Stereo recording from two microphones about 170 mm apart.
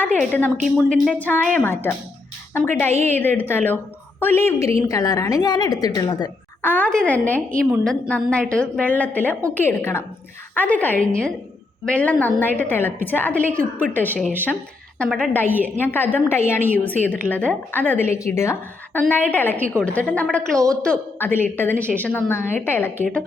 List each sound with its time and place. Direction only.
0.2 s a woman's voice: 10° left (ahead or behind); by 6.3 s 25° left (ahead or behind)
6.6 s a woman's voice: 10° left (ahead or behind)
15.5 s a woman's voice: 10° right (ahead or behind)
15.8 s a woman's voice: 10° left (ahead or behind)